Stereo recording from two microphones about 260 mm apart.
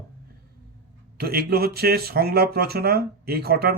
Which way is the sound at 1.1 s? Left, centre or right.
Right.